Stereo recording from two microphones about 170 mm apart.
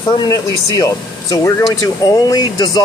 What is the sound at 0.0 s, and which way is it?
Speech, 20° left (ahead or behind).